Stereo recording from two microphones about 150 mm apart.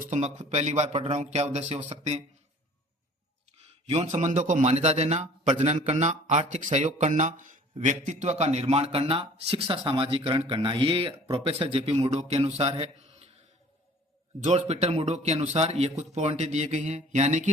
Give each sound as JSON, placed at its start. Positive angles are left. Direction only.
{"t": 0.0, "sound": "a man's voice", "side_deg": -50}
{"t": 3.6, "sound": "a man's voice", "side_deg": -45}
{"t": 14.4, "sound": "a man's voice", "side_deg": -50}